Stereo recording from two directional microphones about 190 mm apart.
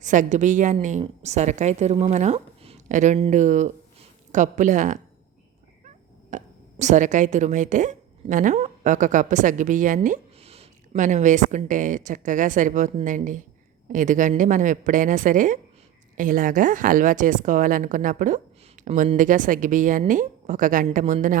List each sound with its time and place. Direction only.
0.0 s a woman's voice: 40° right (ahead or behind)
6.3 s a woman's voice: 40° right (ahead or behind)